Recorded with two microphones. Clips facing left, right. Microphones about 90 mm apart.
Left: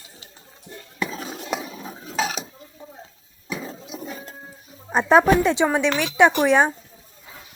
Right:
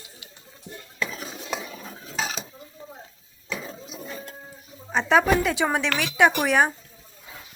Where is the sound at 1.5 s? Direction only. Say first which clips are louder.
Left 3 dB; 15° left (ahead or behind).